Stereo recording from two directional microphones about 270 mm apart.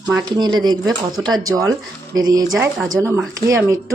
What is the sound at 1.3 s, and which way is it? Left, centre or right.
Speech, centre.